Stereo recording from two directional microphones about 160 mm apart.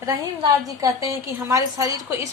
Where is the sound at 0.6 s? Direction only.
20° right (ahead or behind).